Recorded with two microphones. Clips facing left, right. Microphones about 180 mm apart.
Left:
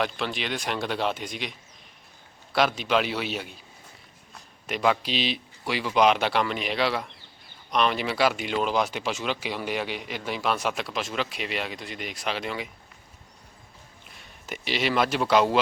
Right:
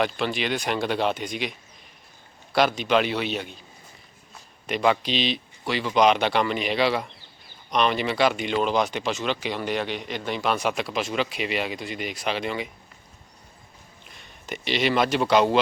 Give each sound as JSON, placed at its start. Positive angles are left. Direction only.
{"t": 0.0, "sound": "speech", "side_deg": 0}
{"t": 4.6, "sound": "speech", "side_deg": 0}
{"t": 14.2, "sound": "speech", "side_deg": 5}